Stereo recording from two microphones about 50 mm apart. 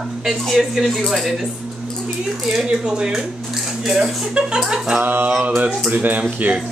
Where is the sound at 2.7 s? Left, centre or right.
Centre.